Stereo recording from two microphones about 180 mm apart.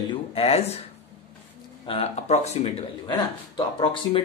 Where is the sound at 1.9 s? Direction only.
35° left (ahead or behind).